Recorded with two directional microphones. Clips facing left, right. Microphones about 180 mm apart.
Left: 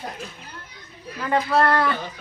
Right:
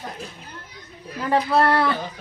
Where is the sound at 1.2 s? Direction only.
30° right (ahead or behind).